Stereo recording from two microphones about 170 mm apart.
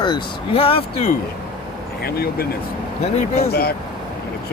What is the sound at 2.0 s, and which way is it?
Speech, 65° left (ahead or behind).